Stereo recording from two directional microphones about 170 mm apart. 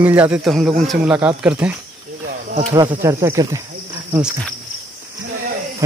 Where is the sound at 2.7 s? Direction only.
25° right (ahead or behind).